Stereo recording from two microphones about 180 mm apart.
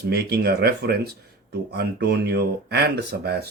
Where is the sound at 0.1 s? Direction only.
60° right (ahead or behind).